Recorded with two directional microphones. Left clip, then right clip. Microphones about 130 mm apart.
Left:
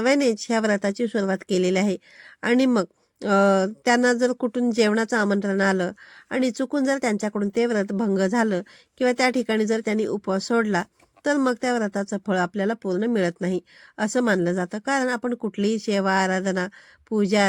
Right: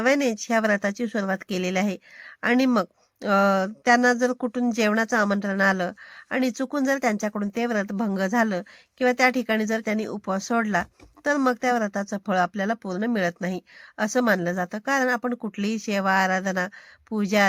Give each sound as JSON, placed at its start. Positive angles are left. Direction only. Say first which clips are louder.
{"t": 0.0, "sound": "a woman's voice", "louder": "left 1 dB", "side_deg": 35}